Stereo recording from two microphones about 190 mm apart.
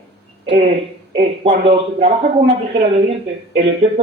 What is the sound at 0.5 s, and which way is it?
Speech, 30° right (ahead or behind).